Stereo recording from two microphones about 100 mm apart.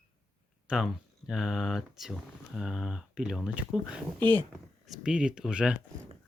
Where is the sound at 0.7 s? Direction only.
10° right (ahead or behind).